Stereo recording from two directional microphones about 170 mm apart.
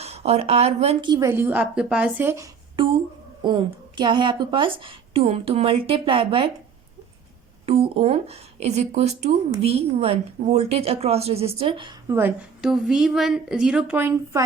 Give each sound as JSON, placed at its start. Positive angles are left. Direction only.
{"t": 0.0, "sound": "a woman's voice", "side_deg": -40}
{"t": 1.1, "sound": "a woman's voice", "side_deg": -15}
{"t": 3.4, "sound": "a woman's voice", "side_deg": -25}
{"t": 7.6, "sound": "a woman's voice", "side_deg": -35}
{"t": 12.0, "sound": "a woman's voice", "side_deg": -15}